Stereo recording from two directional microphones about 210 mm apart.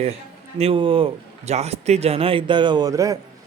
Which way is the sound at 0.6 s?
25° right (ahead or behind).